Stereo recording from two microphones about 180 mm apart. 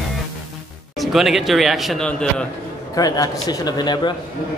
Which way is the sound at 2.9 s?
20° left (ahead or behind).